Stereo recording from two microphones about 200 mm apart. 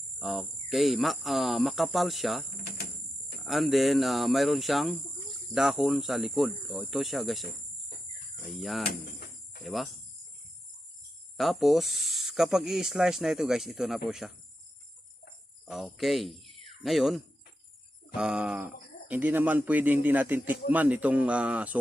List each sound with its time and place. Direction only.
0.2 s speech: centre (ahead or behind)
2.6 s cricket: 50° left (ahead or behind)
3.4 s speech: centre (ahead or behind)
8.4 s speech: centre (ahead or behind)
9.0 s cricket: 50° left (ahead or behind)
9.6 s speech: centre (ahead or behind)
11.3 s speech: centre (ahead or behind)
15.6 s speech: centre (ahead or behind)